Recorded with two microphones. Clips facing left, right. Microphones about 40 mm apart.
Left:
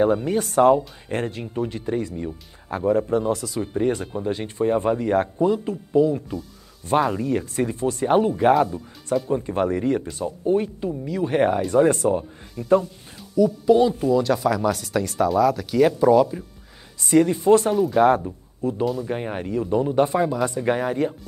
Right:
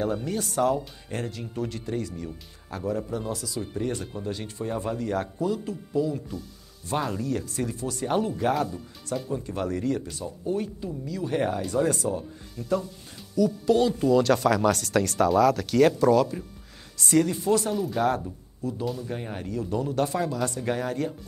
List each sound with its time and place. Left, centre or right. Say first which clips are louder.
0.0 s speech: left 8 dB; left
13.4 s speech: left 5 dB; centre
17.5 s speech: left 8 dB; left